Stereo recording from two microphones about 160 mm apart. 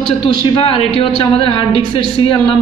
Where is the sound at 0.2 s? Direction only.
35° left (ahead or behind).